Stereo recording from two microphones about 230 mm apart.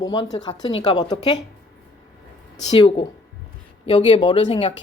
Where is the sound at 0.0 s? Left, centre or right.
Centre.